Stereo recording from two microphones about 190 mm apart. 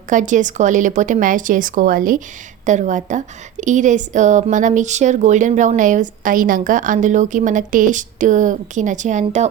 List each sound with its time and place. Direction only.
0.1 s a woman's voice: 40° right (ahead or behind)